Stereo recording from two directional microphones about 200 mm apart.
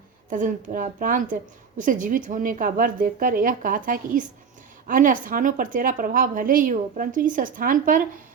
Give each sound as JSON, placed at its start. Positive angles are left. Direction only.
{"t": 0.3, "sound": "a woman's voice", "side_deg": -40}